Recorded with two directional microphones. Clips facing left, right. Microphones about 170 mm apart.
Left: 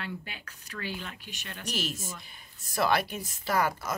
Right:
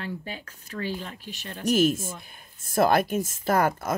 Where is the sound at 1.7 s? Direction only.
50° right (ahead or behind).